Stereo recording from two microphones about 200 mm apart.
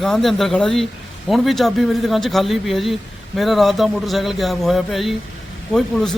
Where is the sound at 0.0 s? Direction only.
Centre (ahead or behind).